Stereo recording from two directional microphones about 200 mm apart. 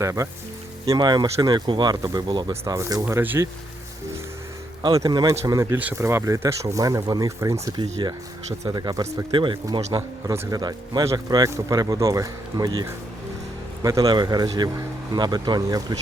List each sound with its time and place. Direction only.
0.0 s speech: 15° right (ahead or behind)
4.8 s speech: 20° right (ahead or behind)